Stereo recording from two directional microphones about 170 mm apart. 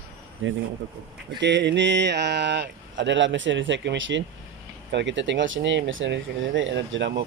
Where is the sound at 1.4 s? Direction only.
90° right.